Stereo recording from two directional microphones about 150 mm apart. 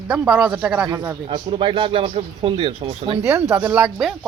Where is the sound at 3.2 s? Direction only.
15° right (ahead or behind).